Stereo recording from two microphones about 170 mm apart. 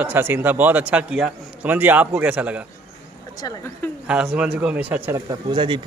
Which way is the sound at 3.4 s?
20° left (ahead or behind).